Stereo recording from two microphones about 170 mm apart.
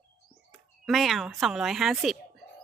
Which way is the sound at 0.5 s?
Centre (ahead or behind).